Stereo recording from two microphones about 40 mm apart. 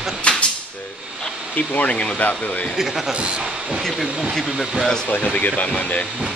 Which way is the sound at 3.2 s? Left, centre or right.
Right.